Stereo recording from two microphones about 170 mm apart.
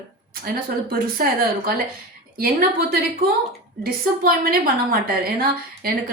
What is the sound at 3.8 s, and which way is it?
A woman's voice, 60° right (ahead or behind).